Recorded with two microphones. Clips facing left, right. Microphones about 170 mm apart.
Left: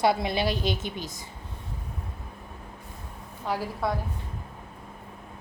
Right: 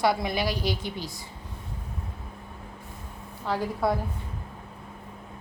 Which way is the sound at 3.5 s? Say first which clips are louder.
Right 1 dB; 15° left (ahead or behind).